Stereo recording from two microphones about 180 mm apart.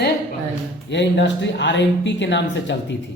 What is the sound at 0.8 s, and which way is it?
Speech, 80° left.